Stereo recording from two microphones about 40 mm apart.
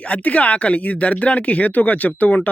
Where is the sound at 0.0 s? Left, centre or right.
Left.